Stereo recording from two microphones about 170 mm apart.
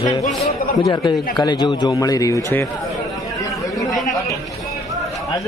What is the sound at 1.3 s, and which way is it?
A man's voice, 25° left (ahead or behind).